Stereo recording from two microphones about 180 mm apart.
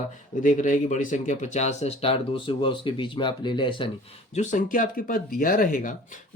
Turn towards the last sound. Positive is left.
turn(degrees=45)  # may be behind; listen again after turning